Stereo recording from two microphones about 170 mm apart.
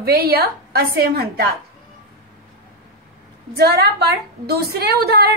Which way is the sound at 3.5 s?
70° right (ahead or behind).